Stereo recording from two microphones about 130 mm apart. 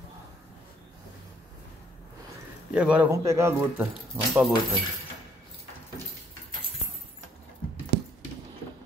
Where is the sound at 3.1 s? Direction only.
20° right (ahead or behind).